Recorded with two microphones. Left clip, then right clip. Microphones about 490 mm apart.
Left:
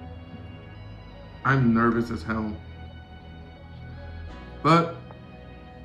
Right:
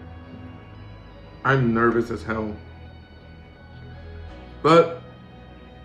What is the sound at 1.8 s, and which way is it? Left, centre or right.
Speech, right.